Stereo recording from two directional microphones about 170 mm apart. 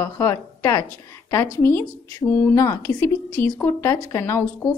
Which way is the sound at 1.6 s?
15° left (ahead or behind).